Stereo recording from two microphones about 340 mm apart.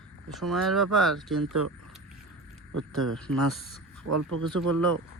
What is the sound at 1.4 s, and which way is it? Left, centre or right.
Speech, right.